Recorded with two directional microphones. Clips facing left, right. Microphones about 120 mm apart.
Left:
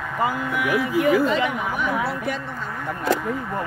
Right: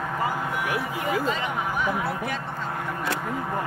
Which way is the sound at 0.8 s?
90° left.